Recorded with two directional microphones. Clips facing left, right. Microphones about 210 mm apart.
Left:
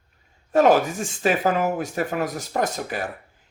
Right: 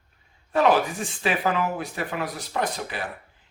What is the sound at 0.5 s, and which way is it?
Speech, 45° left (ahead or behind).